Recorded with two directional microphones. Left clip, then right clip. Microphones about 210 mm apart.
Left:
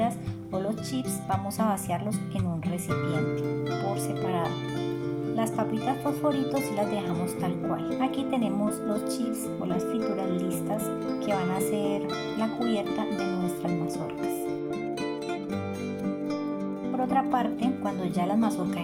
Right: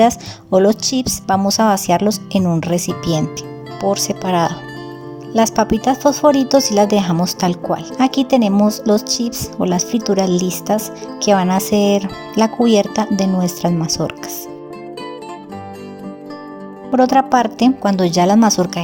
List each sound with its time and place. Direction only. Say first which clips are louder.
0.5 s a woman's voice: right 18 dB; 50° right (ahead or behind)
17.0 s a woman's voice: right 14 dB; 50° right (ahead or behind)